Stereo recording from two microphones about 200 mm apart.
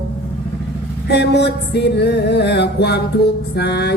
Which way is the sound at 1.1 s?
55° left (ahead or behind).